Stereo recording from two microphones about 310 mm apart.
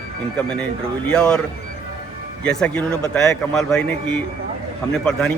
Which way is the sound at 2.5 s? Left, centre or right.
Centre.